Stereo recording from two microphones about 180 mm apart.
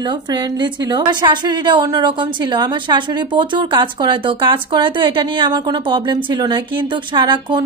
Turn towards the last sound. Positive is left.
turn(degrees=-25)  # may be behind; listen again after turning